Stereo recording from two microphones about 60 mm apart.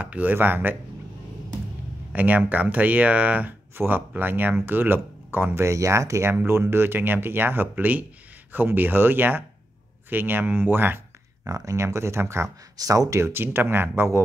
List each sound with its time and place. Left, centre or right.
0.0 s speech: right
2.1 s speech: right
3.7 s speech: right
5.5 s speech: right
6.4 s speech: right
11.4 s speech: right
12.7 s speech: right
13.2 s speech: right